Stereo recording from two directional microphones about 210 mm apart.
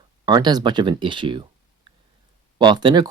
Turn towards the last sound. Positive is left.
turn(degrees=-20)  # may be behind; listen again after turning